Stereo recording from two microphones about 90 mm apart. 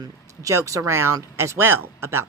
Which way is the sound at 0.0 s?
35° right (ahead or behind).